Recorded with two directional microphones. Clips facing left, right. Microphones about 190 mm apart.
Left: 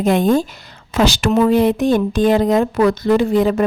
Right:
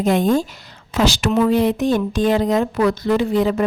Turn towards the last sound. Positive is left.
turn(degrees=50)  # may be behind; listen again after turning